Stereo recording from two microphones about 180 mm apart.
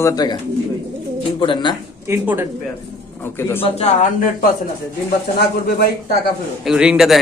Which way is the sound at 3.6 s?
40° left (ahead or behind).